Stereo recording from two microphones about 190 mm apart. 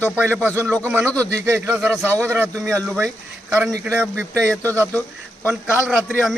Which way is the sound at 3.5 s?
10° right (ahead or behind).